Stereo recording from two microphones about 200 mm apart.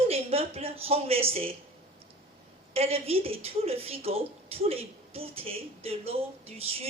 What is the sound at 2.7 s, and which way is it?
A woman's voice, 30° right (ahead or behind).